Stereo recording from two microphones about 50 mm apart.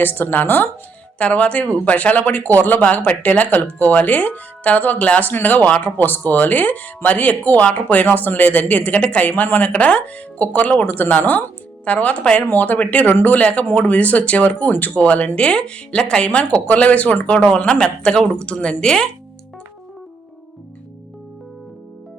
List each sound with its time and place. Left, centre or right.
0.0 s speech: left
1.2 s speech: left
2.8 s speech: left
11.9 s speech: left
12.5 s speech: left
13.1 s speech: left
15.4 s speech: centre